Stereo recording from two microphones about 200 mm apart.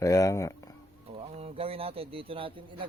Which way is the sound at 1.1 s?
30° right (ahead or behind).